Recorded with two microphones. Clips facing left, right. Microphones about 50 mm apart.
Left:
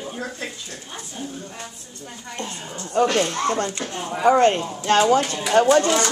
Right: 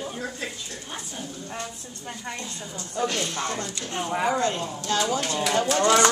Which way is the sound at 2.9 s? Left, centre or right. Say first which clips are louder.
Left 8 dB; left.